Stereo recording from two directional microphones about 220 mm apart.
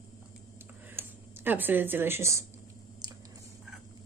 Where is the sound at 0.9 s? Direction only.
10° right (ahead or behind).